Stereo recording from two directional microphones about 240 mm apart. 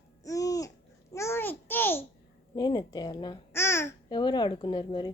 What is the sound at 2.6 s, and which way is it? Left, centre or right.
Speech, centre.